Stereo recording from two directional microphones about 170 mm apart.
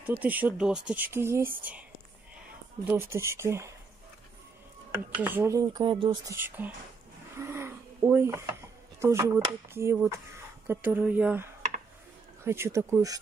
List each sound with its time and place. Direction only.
0.0 s speech: 10° right (ahead or behind)
5.2 s speech: 15° right (ahead or behind)
6.3 s speech: 10° right (ahead or behind)
7.3 s a sound: 15° right (ahead or behind)
9.0 s speech: 15° right (ahead or behind)